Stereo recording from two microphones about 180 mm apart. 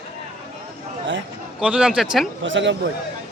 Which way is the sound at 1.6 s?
5° right (ahead or behind).